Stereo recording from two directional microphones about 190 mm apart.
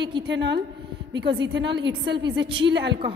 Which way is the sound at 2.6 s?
65° right (ahead or behind).